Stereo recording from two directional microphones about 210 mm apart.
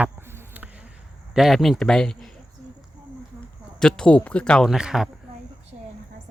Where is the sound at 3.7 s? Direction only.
5° left (ahead or behind).